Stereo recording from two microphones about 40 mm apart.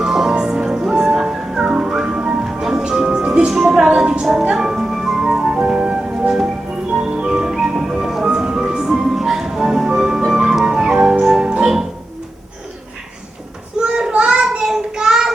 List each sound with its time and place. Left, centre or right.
0.0 s music: centre
3.5 s music: centre
3.9 s music: centre
4.5 s music: centre
5.4 s music: right
13.7 s child singing: right